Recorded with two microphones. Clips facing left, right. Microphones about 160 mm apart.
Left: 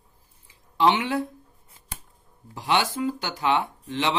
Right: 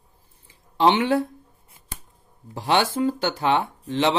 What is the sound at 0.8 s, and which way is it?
Speech, 30° right (ahead or behind).